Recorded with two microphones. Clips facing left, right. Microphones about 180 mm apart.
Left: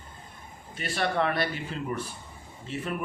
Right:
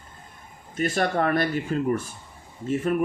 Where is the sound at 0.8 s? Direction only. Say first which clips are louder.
Right 4 dB; 45° right (ahead or behind).